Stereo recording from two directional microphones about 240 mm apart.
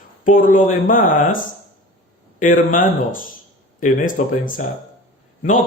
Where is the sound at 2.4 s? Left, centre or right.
Left.